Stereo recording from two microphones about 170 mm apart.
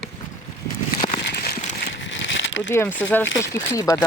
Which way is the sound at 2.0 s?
90° left.